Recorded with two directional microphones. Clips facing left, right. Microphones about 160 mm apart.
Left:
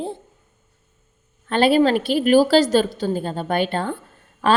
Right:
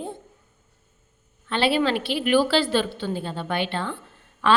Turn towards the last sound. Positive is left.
turn(degrees=40)  # may be behind; listen again after turning